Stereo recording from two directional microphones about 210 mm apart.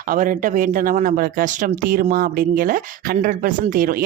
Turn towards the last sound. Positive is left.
turn(degrees=-40)  # may be behind; listen again after turning